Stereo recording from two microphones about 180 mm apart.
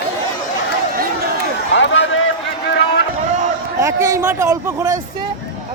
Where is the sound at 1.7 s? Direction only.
90° left.